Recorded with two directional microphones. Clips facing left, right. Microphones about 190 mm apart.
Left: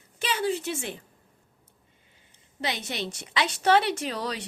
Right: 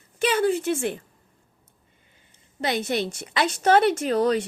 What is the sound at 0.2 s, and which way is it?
Speech, 55° right (ahead or behind).